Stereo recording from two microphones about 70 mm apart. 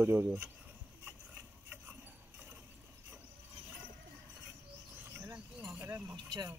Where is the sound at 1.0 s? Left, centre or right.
Right.